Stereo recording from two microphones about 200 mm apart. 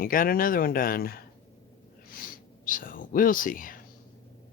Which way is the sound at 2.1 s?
45° left (ahead or behind).